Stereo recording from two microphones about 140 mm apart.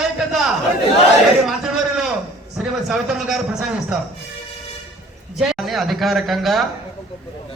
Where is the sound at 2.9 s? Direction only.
5° right (ahead or behind).